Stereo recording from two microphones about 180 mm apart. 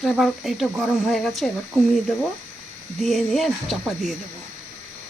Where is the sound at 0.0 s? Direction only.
Centre (ahead or behind).